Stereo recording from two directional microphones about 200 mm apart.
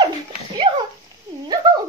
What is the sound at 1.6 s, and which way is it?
Speech, 20° right (ahead or behind).